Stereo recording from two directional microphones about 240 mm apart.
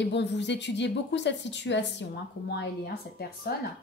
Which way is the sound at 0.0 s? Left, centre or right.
Left.